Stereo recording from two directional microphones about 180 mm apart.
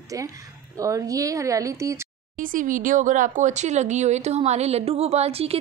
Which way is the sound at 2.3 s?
50° right (ahead or behind).